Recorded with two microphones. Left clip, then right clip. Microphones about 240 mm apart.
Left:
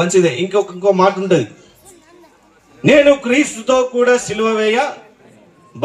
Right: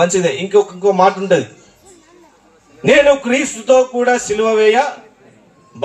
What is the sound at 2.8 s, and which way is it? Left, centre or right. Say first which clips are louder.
Speech: even; left.